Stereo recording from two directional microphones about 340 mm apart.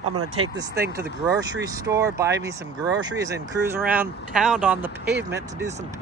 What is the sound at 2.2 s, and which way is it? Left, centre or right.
Speech, centre.